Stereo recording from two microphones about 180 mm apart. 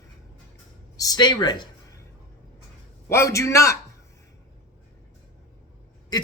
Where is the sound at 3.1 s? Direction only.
15° left (ahead or behind).